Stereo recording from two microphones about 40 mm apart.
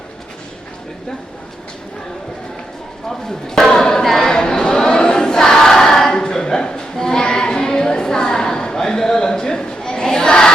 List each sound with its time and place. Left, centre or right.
3.1 s speech: centre
4.0 s crowd: centre